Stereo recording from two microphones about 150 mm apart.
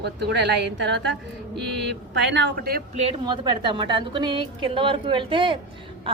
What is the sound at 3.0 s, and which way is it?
Speech, 40° right (ahead or behind).